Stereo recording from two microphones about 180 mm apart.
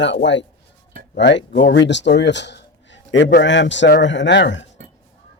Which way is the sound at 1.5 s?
85° left.